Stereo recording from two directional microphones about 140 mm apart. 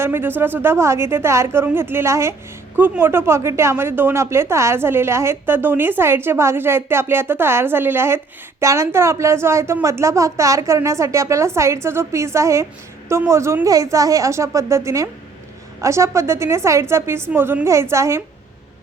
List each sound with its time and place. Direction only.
0.0 s a woman's voice: 15° right (ahead or behind)